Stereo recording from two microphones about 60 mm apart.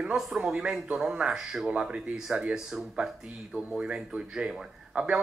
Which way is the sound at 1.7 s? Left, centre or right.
Centre.